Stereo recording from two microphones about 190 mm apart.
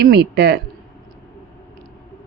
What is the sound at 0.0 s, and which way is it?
Speech, 60° right (ahead or behind).